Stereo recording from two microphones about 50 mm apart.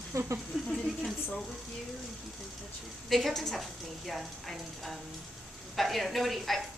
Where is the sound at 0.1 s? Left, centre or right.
Right.